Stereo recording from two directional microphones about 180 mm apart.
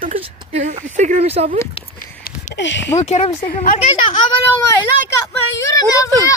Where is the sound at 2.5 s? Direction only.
85° left.